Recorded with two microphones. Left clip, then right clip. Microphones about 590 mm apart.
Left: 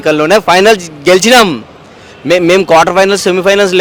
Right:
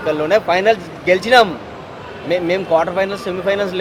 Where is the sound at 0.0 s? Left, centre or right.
Left.